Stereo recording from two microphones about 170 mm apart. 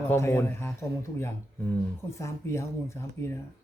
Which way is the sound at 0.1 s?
15° left (ahead or behind).